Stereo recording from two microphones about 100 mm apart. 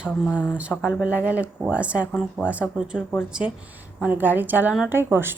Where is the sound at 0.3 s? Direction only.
25° left (ahead or behind).